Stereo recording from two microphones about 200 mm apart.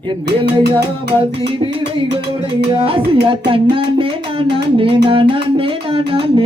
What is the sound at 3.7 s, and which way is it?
Music, 25° right (ahead or behind).